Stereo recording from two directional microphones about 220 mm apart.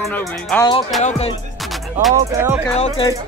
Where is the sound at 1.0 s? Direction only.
30° left (ahead or behind).